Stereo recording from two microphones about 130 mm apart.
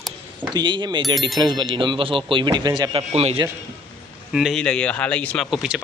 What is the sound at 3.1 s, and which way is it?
Speech, 50° right (ahead or behind).